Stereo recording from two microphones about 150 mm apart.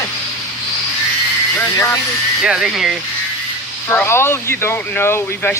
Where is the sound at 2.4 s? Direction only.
5° right (ahead or behind).